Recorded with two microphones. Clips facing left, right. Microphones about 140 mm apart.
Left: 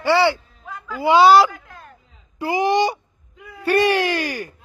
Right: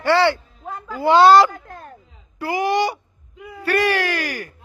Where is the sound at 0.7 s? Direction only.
50° right (ahead or behind).